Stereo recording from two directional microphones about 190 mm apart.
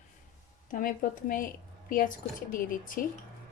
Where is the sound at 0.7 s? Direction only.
45° left (ahead or behind).